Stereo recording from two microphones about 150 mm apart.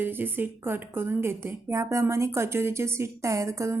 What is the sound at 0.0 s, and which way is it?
Speech, 15° right (ahead or behind).